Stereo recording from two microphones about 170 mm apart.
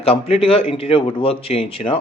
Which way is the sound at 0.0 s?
35° left (ahead or behind).